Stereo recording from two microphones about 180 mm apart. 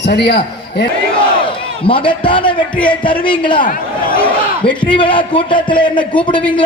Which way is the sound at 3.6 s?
50° left (ahead or behind).